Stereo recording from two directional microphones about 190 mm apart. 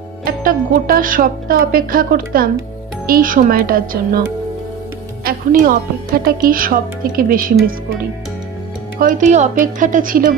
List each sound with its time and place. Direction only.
0.2 s a woman's voice: 45° right (ahead or behind)
5.2 s a woman's voice: 50° right (ahead or behind)
9.0 s a woman's voice: 40° right (ahead or behind)